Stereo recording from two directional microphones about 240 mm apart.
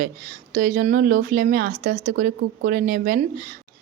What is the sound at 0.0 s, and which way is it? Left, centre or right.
A woman's voice, right.